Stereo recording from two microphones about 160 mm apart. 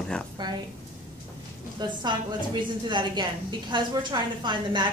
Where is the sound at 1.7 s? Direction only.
30° right (ahead or behind).